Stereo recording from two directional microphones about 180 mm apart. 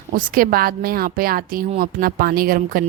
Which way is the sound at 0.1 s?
55° right (ahead or behind).